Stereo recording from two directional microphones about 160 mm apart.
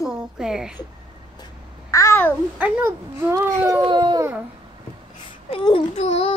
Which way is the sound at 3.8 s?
30° right (ahead or behind).